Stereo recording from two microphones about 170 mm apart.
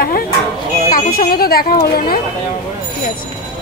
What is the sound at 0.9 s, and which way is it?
Speech, 55° left (ahead or behind).